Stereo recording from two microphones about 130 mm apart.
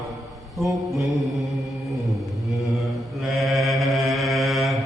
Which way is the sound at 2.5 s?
Centre (ahead or behind).